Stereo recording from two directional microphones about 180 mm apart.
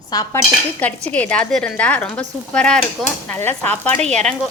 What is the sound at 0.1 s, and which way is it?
Cutlery, 20° left (ahead or behind).